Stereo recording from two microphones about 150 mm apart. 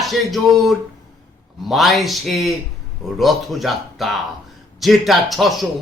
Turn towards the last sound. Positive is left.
turn(degrees=0)  # may be behind; listen again after turning